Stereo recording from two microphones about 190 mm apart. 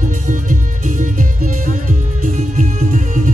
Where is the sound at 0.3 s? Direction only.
40° right (ahead or behind).